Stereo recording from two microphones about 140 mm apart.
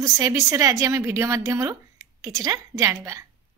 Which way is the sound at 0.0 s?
25° right (ahead or behind).